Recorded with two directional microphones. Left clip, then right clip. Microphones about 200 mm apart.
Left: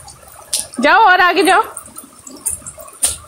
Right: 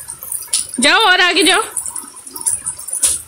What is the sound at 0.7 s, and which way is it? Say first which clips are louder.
Speech: left 2 dB; 20° right (ahead or behind).